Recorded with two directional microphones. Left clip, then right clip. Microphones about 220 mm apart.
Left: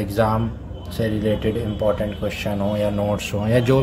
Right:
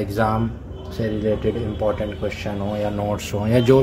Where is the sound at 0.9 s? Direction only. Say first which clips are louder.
Even; 15° left (ahead or behind).